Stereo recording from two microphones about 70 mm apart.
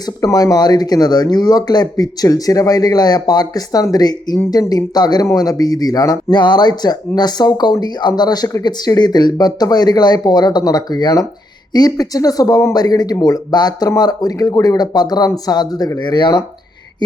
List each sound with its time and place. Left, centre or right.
0.3 s speech: left
5.2 s speech: left
16.0 s speech: left